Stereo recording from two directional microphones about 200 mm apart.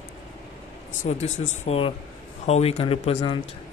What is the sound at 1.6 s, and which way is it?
Speech, 30° left (ahead or behind).